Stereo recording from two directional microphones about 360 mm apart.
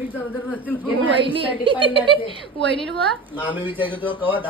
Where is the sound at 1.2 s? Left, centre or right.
Centre.